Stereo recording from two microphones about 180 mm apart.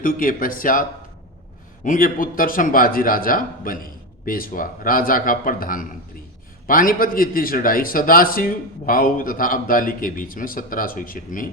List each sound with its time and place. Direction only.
0.0 s a man's voice: 50° left (ahead or behind)